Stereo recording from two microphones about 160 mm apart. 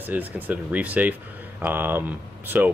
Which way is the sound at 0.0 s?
10° right (ahead or behind).